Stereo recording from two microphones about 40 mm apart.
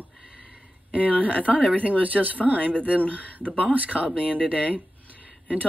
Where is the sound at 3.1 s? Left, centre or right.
Right.